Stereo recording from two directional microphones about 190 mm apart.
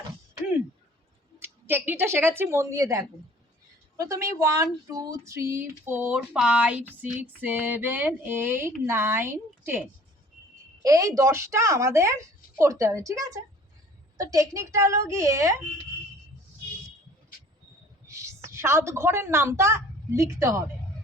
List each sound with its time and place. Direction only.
1.4 s a woman's voice: 10° right (ahead or behind)
18.1 s a woman's voice: 15° right (ahead or behind)